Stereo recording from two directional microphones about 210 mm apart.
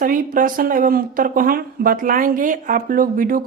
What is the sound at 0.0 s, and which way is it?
Speech, 40° right (ahead or behind).